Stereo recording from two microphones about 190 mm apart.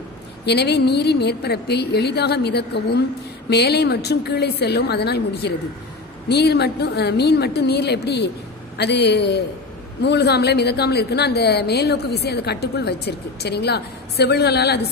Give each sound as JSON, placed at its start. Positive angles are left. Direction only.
{"t": 0.5, "sound": "a woman's voice", "side_deg": 60}